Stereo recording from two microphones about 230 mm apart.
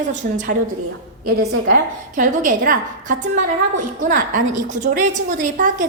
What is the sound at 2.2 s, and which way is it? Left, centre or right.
A woman's voice, right.